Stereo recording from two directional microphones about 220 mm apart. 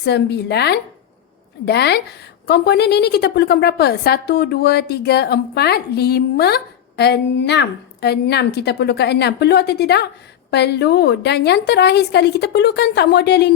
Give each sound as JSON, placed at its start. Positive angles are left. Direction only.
{"t": 0.0, "sound": "a woman's voice", "side_deg": 50}